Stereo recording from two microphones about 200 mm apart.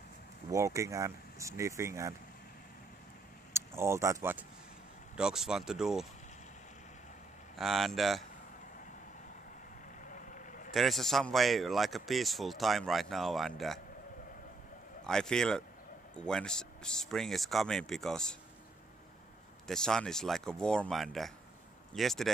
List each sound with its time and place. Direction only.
0.5 s speech: 15° right (ahead or behind)
3.5 s speech: 15° right (ahead or behind)
7.5 s speech: centre (ahead or behind)
10.0 s vehicle: 40° left (ahead or behind)
10.7 s speech: centre (ahead or behind)
15.0 s speech: 5° left (ahead or behind)
19.7 s speech: 5° left (ahead or behind)